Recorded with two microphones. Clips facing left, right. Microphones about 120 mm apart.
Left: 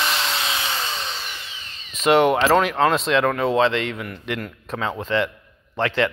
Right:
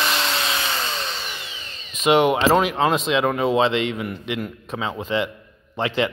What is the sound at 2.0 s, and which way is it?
Speech, 10° right (ahead or behind).